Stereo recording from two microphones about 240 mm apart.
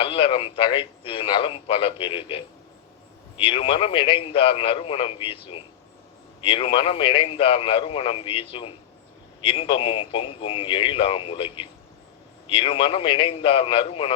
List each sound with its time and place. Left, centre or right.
0.0 s a man's voice: left